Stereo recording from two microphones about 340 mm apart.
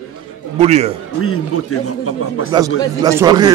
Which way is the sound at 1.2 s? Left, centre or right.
Left.